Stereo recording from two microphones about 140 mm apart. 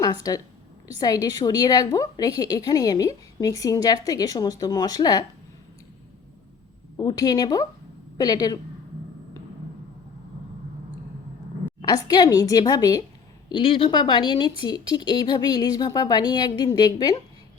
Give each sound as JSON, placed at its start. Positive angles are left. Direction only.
{"t": 0.0, "sound": "a woman's voice", "side_deg": 25}
{"t": 6.9, "sound": "a woman's voice", "side_deg": 30}
{"t": 11.8, "sound": "a woman's voice", "side_deg": 30}